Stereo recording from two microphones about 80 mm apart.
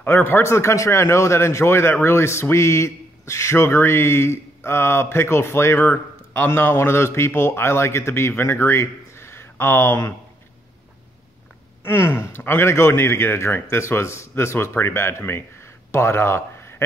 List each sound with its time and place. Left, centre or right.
0.0 s speech: left
11.8 s speech: left